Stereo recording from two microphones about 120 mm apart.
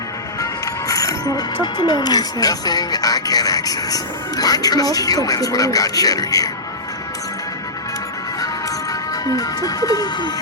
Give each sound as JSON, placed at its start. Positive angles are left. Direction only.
{"t": 0.9, "sound": "speech", "side_deg": 30}
{"t": 8.9, "sound": "speech", "side_deg": 30}